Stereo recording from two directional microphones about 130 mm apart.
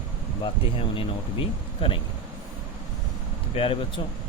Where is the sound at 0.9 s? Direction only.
45° left (ahead or behind).